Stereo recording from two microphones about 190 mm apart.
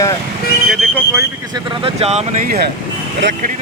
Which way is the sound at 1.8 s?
35° right (ahead or behind).